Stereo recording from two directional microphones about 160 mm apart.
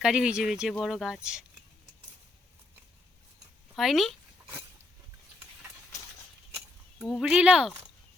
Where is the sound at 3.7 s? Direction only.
Centre (ahead or behind).